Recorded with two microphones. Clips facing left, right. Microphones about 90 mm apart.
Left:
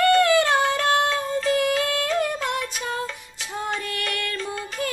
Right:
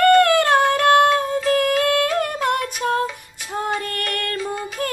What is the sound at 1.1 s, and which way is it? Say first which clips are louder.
Child singing: right 4 dB; 55° right (ahead or behind).